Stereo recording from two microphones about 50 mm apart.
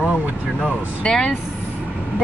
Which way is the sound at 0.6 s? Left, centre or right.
Centre.